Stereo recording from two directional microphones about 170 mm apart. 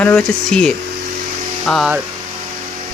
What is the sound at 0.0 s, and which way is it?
Speech, 10° left (ahead or behind).